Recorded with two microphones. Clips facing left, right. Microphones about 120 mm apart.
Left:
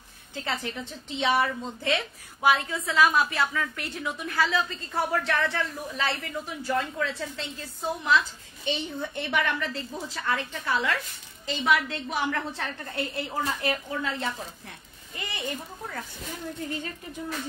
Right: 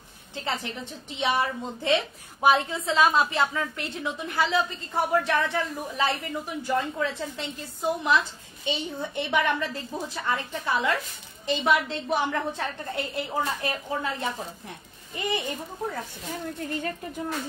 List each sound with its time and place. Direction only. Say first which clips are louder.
0.3 s a woman's voice: right 1 dB; 20° right (ahead or behind)